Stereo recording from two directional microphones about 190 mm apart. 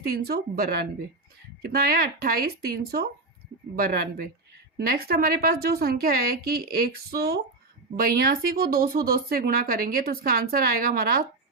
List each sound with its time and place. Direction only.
0.3 s speech: 50° right (ahead or behind)